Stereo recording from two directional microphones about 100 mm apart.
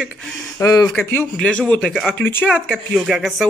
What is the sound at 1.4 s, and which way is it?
A woman's voice, 10° left (ahead or behind).